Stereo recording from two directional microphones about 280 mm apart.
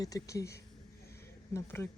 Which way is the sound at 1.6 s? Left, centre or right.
Centre.